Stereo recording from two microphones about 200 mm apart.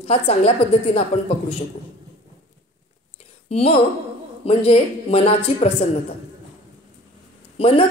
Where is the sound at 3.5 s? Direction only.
30° left (ahead or behind).